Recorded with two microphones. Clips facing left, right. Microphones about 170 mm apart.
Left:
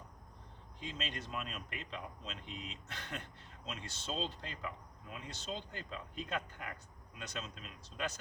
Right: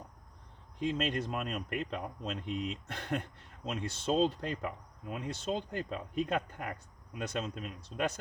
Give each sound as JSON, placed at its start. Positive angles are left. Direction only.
{"t": 0.8, "sound": "speech", "side_deg": -55}